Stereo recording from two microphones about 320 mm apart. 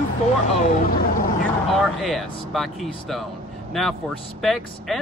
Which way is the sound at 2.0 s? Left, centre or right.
Centre.